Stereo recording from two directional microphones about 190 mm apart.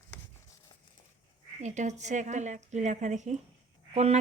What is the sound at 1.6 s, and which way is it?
Speech, 40° right (ahead or behind).